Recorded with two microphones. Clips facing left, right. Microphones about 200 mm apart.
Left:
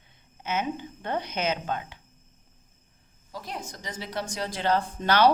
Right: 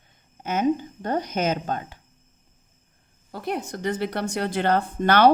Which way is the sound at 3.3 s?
60° right (ahead or behind).